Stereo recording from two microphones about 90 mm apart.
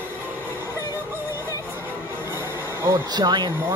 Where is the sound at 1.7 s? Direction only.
25° right (ahead or behind).